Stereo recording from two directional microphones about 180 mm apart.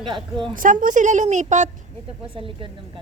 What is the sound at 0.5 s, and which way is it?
Speech, 50° right (ahead or behind).